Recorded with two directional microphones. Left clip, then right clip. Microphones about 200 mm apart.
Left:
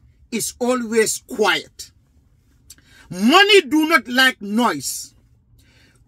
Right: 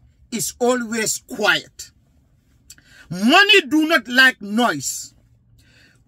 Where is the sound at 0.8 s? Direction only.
15° right (ahead or behind).